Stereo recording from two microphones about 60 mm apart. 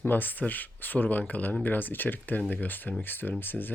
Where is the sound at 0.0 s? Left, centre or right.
Left.